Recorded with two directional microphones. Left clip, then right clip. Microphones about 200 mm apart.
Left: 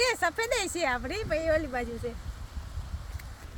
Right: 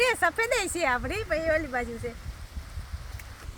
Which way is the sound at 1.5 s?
25° left (ahead or behind).